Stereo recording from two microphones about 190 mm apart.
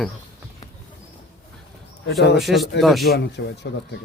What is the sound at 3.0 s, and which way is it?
Speech, 60° left (ahead or behind).